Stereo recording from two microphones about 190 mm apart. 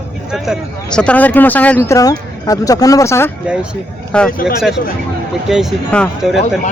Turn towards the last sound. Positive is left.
turn(degrees=0)  # may be behind; listen again after turning